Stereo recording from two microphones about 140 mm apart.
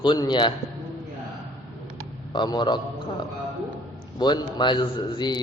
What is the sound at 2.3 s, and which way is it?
Speech, 30° left (ahead or behind).